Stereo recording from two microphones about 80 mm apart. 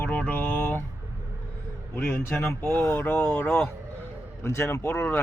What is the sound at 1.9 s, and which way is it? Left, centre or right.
A man's voice, left.